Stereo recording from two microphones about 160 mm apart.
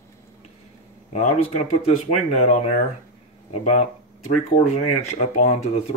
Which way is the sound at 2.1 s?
45° left (ahead or behind).